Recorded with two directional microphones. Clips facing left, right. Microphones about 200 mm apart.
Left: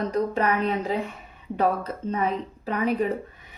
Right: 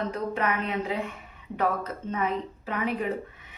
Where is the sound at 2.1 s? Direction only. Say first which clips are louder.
Left 3 dB; 35° left (ahead or behind).